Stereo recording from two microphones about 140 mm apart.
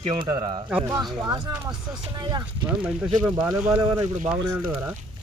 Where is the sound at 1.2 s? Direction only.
30° right (ahead or behind).